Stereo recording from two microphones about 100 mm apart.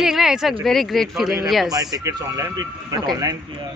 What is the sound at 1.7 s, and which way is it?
Speech, 35° right (ahead or behind).